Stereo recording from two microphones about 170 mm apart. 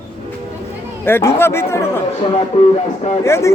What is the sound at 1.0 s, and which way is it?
Speech, 15° left (ahead or behind).